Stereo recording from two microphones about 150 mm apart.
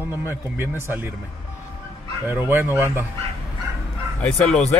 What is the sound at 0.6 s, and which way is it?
Speech, 15° right (ahead or behind).